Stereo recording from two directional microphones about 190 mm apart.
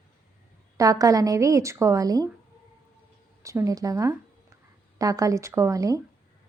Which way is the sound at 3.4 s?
15° right (ahead or behind).